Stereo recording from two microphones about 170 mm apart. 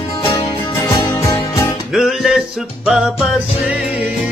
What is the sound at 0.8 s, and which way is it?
Music, 20° left (ahead or behind).